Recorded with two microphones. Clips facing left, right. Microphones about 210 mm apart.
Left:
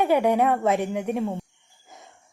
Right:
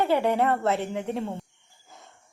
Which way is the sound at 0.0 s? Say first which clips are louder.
Left 3 dB; 15° left (ahead or behind).